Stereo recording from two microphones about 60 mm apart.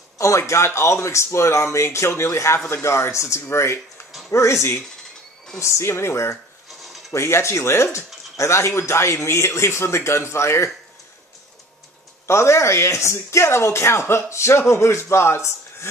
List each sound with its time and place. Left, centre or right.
0.2 s speech: left
6.7 s a sound: centre
7.1 s speech: left
12.3 s speech: left